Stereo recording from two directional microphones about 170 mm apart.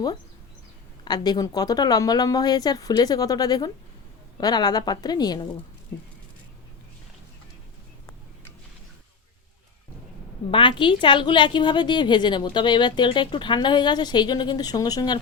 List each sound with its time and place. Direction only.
1.0 s a woman's voice: 25° left (ahead or behind)
10.5 s a woman's voice: 30° left (ahead or behind)